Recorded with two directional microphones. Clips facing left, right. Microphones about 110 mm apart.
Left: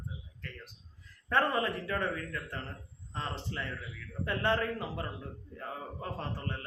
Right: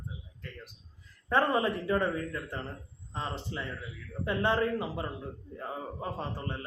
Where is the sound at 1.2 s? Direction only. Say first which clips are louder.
Right 3 dB; 20° right (ahead or behind).